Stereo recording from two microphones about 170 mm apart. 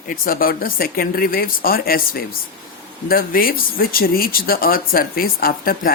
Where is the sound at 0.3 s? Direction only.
55° left (ahead or behind).